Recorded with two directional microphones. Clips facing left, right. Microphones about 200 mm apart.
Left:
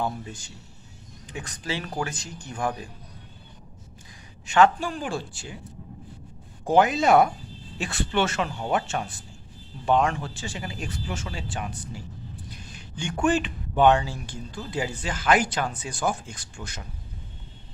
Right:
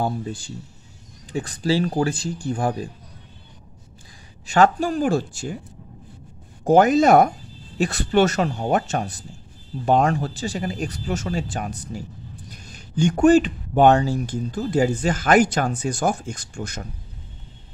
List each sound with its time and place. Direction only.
0.0 s speech: 35° right (ahead or behind)
4.5 s speech: 40° right (ahead or behind)
6.6 s speech: 45° right (ahead or behind)